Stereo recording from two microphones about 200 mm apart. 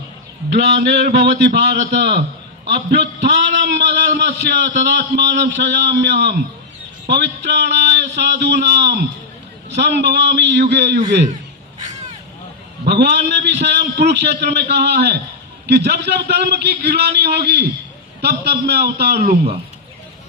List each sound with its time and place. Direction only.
0.5 s a man's voice: 55° right (ahead or behind)
12.8 s a man's voice: 55° right (ahead or behind)